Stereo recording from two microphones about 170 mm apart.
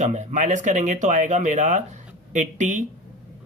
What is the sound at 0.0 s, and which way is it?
Speech, 45° right (ahead or behind).